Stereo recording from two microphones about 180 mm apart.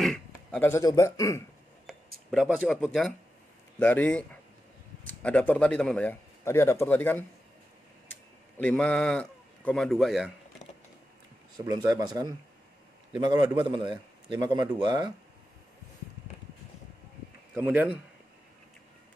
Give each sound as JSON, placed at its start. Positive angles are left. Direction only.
{"t": 0.3, "sound": "a man's voice", "side_deg": 10}
{"t": 2.3, "sound": "a man's voice", "side_deg": -5}
{"t": 11.6, "sound": "a man's voice", "side_deg": -20}
{"t": 17.6, "sound": "a man's voice", "side_deg": -10}